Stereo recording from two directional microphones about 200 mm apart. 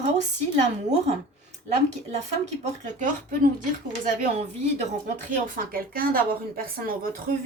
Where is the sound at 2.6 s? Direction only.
40° right (ahead or behind).